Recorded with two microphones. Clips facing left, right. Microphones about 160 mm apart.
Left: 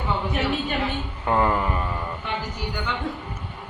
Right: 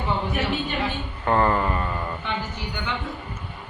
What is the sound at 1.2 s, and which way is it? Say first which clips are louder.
Speech: right 1 dB; 5° left (ahead or behind).